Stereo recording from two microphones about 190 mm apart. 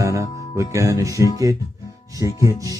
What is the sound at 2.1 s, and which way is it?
Music, 20° right (ahead or behind).